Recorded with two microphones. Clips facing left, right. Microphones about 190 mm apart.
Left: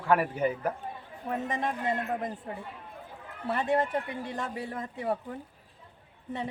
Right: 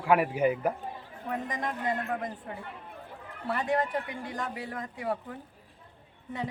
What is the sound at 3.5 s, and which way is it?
A woman's voice, 25° left (ahead or behind).